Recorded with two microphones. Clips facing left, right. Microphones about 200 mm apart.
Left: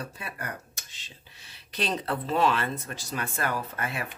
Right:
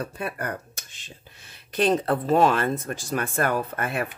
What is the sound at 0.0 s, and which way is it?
Speech, 55° right (ahead or behind).